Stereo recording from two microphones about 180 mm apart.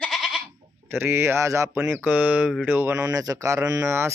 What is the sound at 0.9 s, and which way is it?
Speech, 10° right (ahead or behind).